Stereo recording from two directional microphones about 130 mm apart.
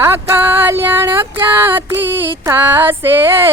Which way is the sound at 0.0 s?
20° right (ahead or behind).